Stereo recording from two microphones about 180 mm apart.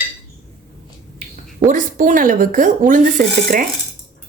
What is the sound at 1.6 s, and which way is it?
Speech, 45° right (ahead or behind).